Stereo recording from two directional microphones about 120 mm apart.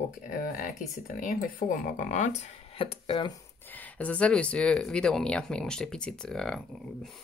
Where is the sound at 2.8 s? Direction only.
50° left (ahead or behind).